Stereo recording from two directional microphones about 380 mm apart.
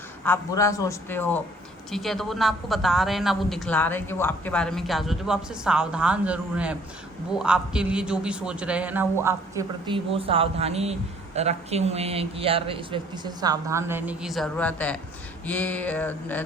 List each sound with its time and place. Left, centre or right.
0.3 s a man's voice: centre